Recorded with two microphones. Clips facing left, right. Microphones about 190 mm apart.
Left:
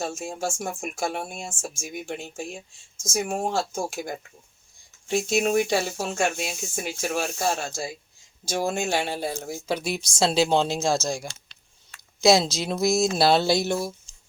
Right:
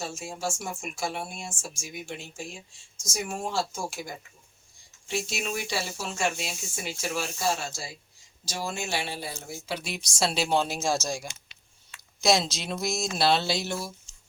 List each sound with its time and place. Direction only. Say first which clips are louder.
0.0 s speech: left 4 dB; 50° left (ahead or behind)
10.0 s speech: left 5 dB; 25° left (ahead or behind)
10.8 s speech: left 4 dB; 10° left (ahead or behind)
11.9 s a sound: left 6 dB; 35° left (ahead or behind)
13.1 s speech: left 1 dB; 40° left (ahead or behind)